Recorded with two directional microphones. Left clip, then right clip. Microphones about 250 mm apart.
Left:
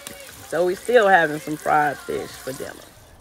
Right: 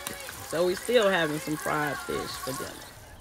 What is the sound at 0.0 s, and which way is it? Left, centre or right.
Run, centre.